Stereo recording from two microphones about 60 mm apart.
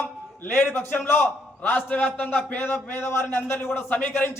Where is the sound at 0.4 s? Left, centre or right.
Left.